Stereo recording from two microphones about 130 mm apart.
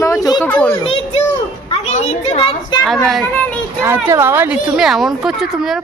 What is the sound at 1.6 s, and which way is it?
Speech, 55° left (ahead or behind).